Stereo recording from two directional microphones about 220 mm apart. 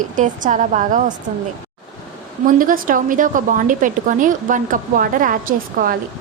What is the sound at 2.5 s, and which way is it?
A woman's voice, 40° right (ahead or behind).